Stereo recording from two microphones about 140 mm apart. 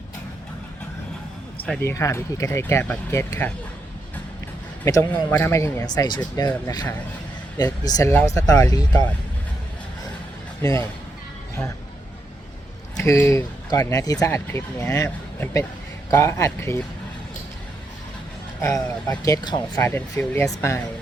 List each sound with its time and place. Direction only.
1.8 s speech: 20° left (ahead or behind)
4.9 s speech: 20° left (ahead or behind)
7.6 s speech: 25° left (ahead or behind)
10.6 s speech: 25° left (ahead or behind)
13.0 s speech: 20° left (ahead or behind)
18.6 s speech: 25° left (ahead or behind)
19.8 s speech: 15° left (ahead or behind)